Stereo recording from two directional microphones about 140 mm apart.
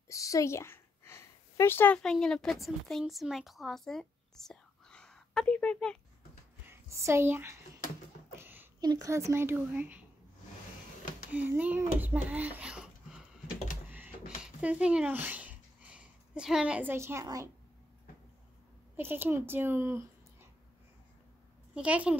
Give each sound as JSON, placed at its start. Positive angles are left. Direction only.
{"t": 0.1, "sound": "a sound", "side_deg": 25}
{"t": 2.0, "sound": "speech", "side_deg": 5}
{"t": 6.7, "sound": "a woman's voice", "side_deg": -20}
{"t": 8.4, "sound": "a sound", "side_deg": -15}
{"t": 8.8, "sound": "a woman's voice", "side_deg": -25}
{"t": 11.3, "sound": "a child's voice", "side_deg": -10}
{"t": 13.8, "sound": "a sound", "side_deg": -10}
{"t": 16.9, "sound": "speech", "side_deg": -20}
{"t": 18.9, "sound": "a woman's voice", "side_deg": -15}
{"t": 21.7, "sound": "a woman's voice", "side_deg": -10}